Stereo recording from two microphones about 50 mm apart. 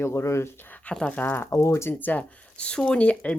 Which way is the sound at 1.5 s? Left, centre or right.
Left.